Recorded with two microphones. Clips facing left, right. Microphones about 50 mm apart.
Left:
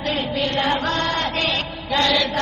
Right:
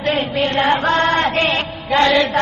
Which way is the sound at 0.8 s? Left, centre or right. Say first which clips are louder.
Right 6 dB; right.